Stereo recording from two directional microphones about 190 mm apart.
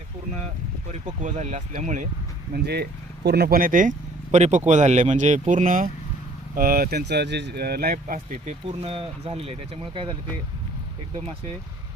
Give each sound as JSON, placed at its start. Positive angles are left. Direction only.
{"t": 0.9, "sound": "speech", "side_deg": -40}
{"t": 2.5, "sound": "speech", "side_deg": -60}